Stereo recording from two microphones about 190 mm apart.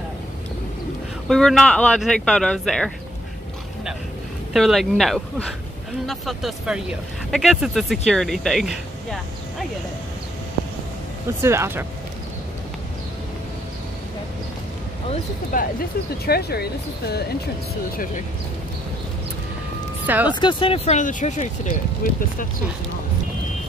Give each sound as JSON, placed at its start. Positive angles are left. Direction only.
{"t": 1.3, "sound": "speech", "side_deg": 0}
{"t": 4.6, "sound": "speech", "side_deg": 0}
{"t": 11.4, "sound": "speech", "side_deg": -15}
{"t": 15.5, "sound": "speech", "side_deg": 45}
{"t": 16.3, "sound": "speech", "side_deg": 55}
{"t": 20.1, "sound": "speech", "side_deg": -10}
{"t": 20.3, "sound": "speech", "side_deg": 25}